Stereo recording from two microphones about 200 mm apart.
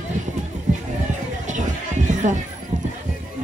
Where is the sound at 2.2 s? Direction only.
35° right (ahead or behind).